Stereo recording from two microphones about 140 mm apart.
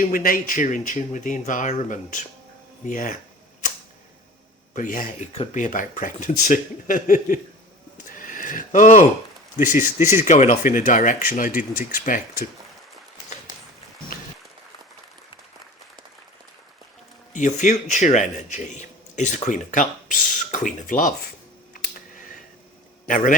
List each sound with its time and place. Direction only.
0.0 s speech: 75° left (ahead or behind)
4.7 s speech: 70° left (ahead or behind)
8.1 s a sound: 70° left (ahead or behind)
9.6 s speech: 65° left (ahead or behind)
11.7 s speech: 75° left (ahead or behind)
17.3 s speech: 60° left (ahead or behind)
23.0 s speech: 75° left (ahead or behind)